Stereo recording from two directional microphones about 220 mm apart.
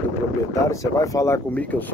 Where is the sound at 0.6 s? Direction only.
15° left (ahead or behind).